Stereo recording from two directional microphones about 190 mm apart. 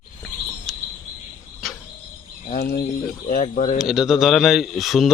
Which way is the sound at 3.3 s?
45° left (ahead or behind).